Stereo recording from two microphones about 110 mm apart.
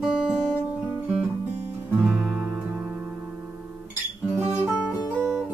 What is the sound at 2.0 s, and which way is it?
Music, 10° right (ahead or behind).